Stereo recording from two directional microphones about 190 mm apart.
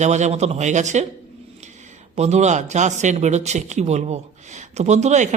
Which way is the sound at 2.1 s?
35° right (ahead or behind).